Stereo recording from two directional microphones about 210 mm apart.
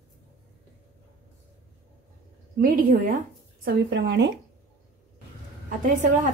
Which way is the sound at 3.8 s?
55° right (ahead or behind).